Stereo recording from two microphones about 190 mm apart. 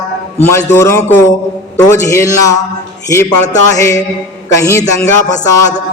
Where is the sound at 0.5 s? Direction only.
15° left (ahead or behind).